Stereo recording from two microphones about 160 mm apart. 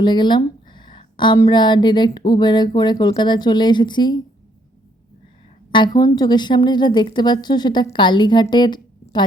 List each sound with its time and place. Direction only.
0.0 s speech: 30° left (ahead or behind)
5.7 s speech: 25° left (ahead or behind)